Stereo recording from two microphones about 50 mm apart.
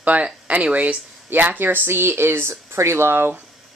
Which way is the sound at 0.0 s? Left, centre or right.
Right.